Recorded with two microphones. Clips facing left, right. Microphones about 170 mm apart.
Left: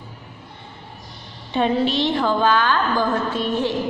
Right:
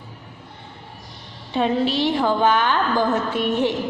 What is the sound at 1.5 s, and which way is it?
A woman's voice, 5° right (ahead or behind).